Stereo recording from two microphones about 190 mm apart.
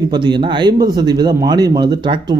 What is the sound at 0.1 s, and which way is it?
A man's voice, 25° right (ahead or behind).